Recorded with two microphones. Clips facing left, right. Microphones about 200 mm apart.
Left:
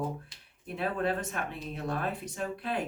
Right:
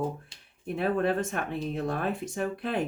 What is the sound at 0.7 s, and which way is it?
Speech, 50° right (ahead or behind).